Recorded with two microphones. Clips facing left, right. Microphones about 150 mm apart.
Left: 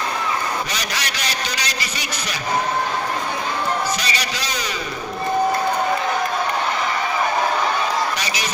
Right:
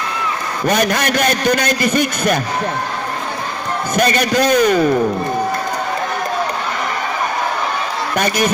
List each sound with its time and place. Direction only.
0.7 s a man's voice: 50° right (ahead or behind)
3.9 s a man's voice: 50° right (ahead or behind)
8.2 s a man's voice: 55° right (ahead or behind)